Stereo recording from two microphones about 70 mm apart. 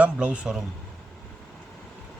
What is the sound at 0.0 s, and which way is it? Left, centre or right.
Speech, centre.